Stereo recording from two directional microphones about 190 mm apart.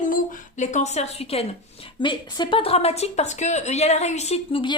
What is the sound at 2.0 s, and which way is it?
A woman's voice, 25° left (ahead or behind).